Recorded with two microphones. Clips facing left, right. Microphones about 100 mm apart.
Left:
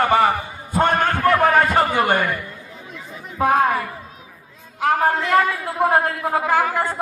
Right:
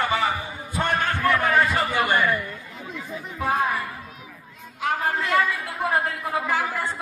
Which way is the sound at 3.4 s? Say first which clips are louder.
Left 7 dB; 60° left (ahead or behind).